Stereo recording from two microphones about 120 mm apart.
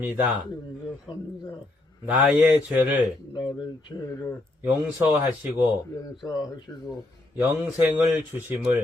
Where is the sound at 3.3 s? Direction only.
40° left (ahead or behind).